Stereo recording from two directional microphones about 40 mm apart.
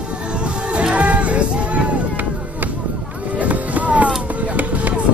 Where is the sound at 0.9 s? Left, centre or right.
Right.